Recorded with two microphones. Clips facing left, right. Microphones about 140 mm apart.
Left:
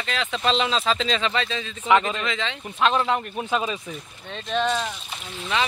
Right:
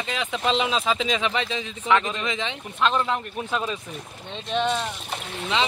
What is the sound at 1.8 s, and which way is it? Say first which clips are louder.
Speech: left 2 dB; 5° left (ahead or behind).